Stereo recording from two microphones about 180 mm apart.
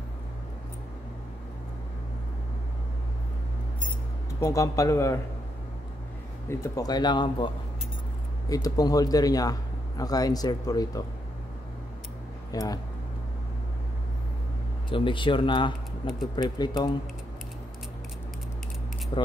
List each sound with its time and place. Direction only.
4.4 s a man's voice: 20° left (ahead or behind)
6.5 s a man's voice: 20° left (ahead or behind)
12.5 s a man's voice: 20° left (ahead or behind)
14.9 s a man's voice: 25° left (ahead or behind)
19.1 s a man's voice: 30° left (ahead or behind)